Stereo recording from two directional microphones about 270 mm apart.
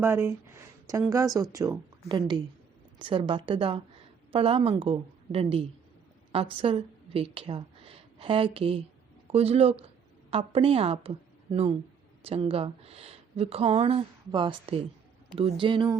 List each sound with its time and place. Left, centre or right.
0.0 s a woman's voice: centre
12.2 s speech: right